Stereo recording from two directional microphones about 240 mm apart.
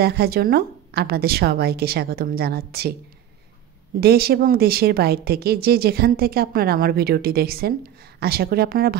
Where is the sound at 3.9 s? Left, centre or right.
Right.